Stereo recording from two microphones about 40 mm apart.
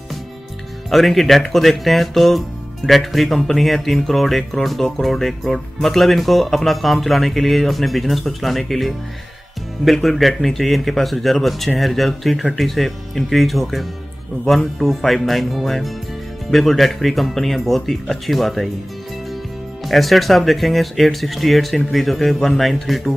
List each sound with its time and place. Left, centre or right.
0.8 s speech: centre
19.8 s speech: centre